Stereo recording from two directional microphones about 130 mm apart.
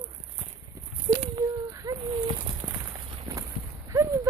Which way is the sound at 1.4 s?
25° right (ahead or behind).